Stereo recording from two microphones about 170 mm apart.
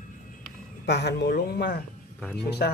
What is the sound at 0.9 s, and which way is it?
Speech, 80° left.